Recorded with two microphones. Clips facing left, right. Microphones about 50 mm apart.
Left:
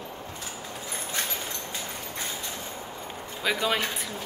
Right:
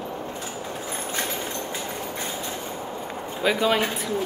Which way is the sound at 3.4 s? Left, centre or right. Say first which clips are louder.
Right 5 dB; centre.